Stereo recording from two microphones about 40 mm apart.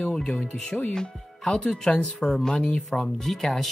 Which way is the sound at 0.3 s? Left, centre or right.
Centre.